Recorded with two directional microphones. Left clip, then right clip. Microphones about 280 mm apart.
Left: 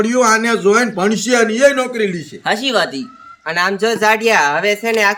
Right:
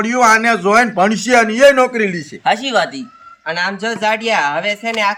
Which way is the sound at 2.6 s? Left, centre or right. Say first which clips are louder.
Even; centre.